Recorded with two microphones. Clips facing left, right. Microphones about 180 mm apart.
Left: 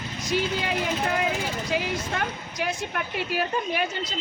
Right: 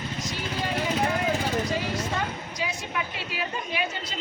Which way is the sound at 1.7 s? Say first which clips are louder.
Left 1 dB; 65° left (ahead or behind).